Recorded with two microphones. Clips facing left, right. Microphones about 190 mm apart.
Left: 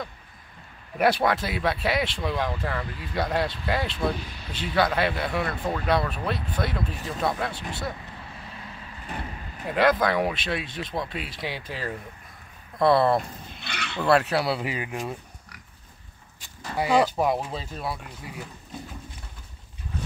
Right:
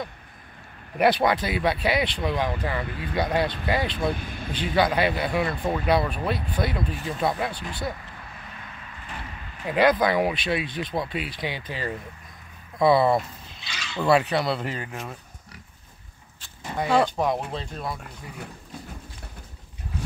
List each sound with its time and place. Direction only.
0.9 s speech: centre (ahead or behind)
2.9 s speech: 60° right (ahead or behind)
3.2 s speech: centre (ahead or behind)
4.2 s speech: 50° right (ahead or behind)
4.7 s speech: centre (ahead or behind)
9.7 s speech: centre (ahead or behind)
13.6 s a sound: 60° left (ahead or behind)
14.0 s speech: centre (ahead or behind)
16.7 s speech: 5° left (ahead or behind)